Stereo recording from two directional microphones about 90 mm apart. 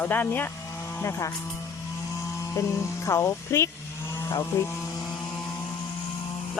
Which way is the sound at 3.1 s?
35° left (ahead or behind).